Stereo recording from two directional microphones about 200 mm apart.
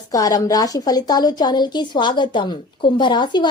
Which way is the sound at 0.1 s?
20° left (ahead or behind).